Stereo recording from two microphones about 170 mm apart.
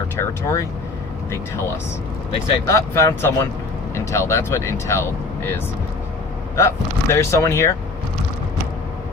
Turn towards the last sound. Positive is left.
turn(degrees=15)  # may be behind; listen again after turning